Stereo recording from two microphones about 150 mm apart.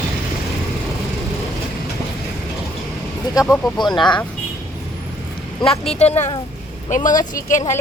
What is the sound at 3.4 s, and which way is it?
Speech, 25° left (ahead or behind).